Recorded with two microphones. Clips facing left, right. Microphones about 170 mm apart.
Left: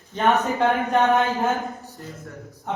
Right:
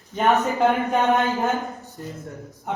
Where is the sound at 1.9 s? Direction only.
20° right (ahead or behind).